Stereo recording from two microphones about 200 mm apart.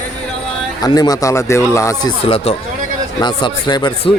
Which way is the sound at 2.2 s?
30° left (ahead or behind).